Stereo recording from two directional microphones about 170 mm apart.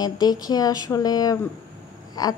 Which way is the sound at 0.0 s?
25° left (ahead or behind).